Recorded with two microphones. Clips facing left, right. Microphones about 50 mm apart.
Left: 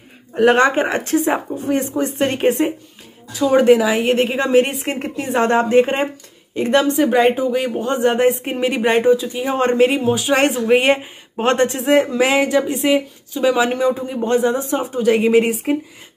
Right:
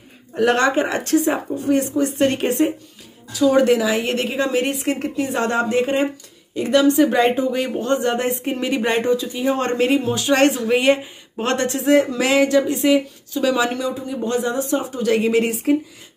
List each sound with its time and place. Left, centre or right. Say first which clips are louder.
0.3 s speech: left 4 dB; left
7.0 s speech: left 1 dB; centre
13.7 s speech: left 5 dB; left